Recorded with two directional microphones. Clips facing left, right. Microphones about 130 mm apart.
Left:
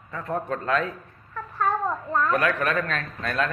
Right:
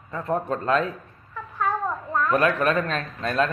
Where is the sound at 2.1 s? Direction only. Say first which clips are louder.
Right 1 dB; 10° right (ahead or behind).